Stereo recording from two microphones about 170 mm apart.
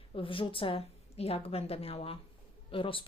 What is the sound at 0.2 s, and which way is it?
A woman's voice, 30° left (ahead or behind).